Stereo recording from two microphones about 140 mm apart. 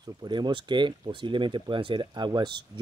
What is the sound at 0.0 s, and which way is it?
Speech, 30° right (ahead or behind).